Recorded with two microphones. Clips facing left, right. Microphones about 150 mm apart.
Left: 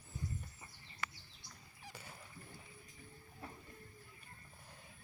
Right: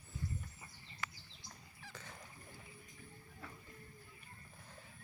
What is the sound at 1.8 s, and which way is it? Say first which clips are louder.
Dog: even; 10° left (ahead or behind).